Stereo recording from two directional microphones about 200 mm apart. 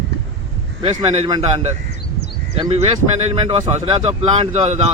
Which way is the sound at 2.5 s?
30° right (ahead or behind).